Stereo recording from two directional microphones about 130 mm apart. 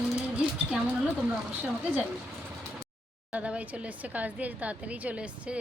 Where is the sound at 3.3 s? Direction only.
10° right (ahead or behind).